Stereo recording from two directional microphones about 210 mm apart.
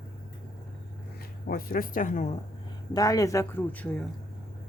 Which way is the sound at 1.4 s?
45° left (ahead or behind).